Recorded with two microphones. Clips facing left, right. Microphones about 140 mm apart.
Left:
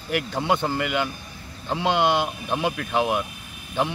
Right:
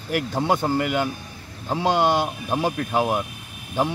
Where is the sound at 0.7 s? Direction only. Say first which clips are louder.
Right 3 dB; 45° right (ahead or behind).